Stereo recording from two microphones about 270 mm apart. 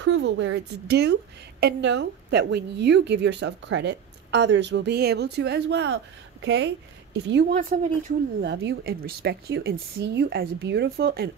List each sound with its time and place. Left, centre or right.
0.0 s a woman's voice: right